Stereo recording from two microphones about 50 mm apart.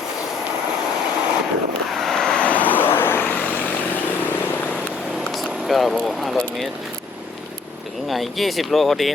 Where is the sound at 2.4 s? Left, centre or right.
Left.